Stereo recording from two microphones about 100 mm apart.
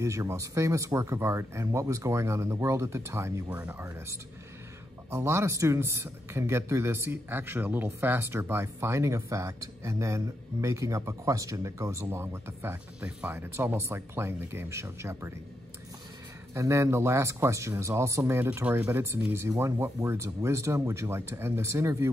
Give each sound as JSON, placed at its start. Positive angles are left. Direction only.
{"t": 0.0, "sound": "speech", "side_deg": -30}
{"t": 3.4, "sound": "speech", "side_deg": -10}
{"t": 3.7, "sound": "speech", "side_deg": -30}
{"t": 16.5, "sound": "speech", "side_deg": -30}